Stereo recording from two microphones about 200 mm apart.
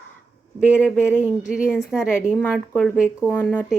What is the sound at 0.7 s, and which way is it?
A woman's voice, 5° right (ahead or behind).